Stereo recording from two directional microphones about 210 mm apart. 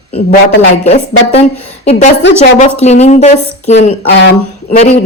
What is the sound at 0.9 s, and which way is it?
A woman's voice, 30° left (ahead or behind).